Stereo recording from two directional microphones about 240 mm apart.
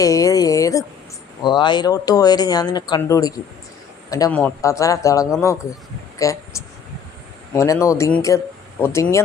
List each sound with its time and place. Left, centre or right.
0.0 s a sound: centre
1.5 s speech: centre
7.5 s speech: centre